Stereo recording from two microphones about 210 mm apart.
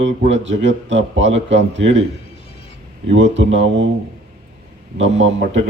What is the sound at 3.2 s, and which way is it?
Speech, 60° right (ahead or behind).